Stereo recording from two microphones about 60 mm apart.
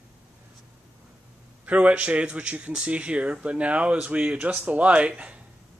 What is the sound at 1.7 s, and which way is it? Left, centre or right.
Speech, right.